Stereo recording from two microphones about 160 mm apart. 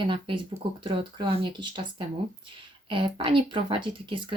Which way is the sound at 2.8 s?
30° right (ahead or behind).